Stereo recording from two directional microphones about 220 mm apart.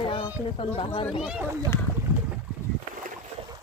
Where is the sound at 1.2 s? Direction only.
5° right (ahead or behind).